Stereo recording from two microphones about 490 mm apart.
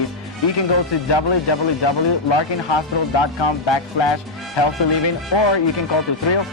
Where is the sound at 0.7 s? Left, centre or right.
Left.